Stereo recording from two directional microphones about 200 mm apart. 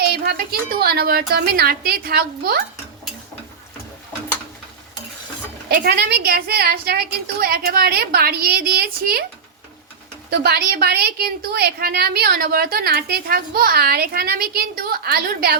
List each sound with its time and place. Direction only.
0.0 s a woman's voice: 50° right (ahead or behind)
5.6 s a woman's voice: 50° right (ahead or behind)
10.2 s a woman's voice: 50° right (ahead or behind)